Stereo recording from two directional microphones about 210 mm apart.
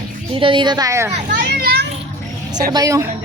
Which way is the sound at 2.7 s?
15° right (ahead or behind).